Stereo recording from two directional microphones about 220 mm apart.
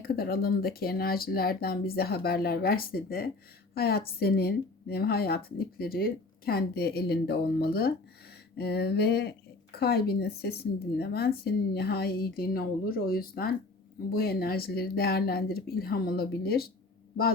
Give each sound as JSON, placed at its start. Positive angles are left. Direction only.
{"t": 0.0, "sound": "speech", "side_deg": 45}